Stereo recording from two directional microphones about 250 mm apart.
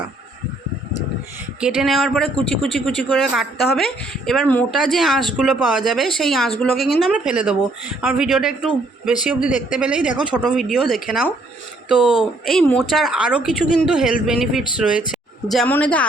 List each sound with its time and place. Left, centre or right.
1.6 s speech: centre
9.5 s speech: left
9.7 s speech: centre
12.5 s speech: centre